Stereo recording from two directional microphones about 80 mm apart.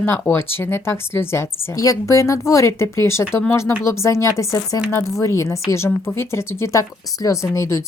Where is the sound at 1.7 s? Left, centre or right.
Left.